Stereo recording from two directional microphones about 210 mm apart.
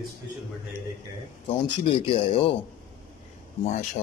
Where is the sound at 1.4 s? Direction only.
25° left (ahead or behind).